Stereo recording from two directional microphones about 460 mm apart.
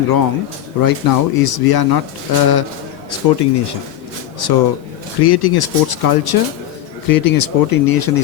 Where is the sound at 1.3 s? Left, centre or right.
Left.